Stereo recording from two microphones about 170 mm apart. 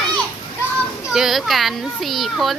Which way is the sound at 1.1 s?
Centre (ahead or behind).